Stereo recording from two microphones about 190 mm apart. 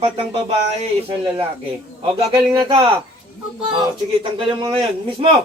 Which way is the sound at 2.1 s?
20° right (ahead or behind).